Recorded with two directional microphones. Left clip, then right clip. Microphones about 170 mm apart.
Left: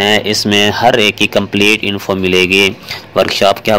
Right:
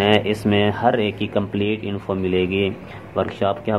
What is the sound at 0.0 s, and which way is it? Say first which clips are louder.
Speech: left 6 dB; 30° left (ahead or behind).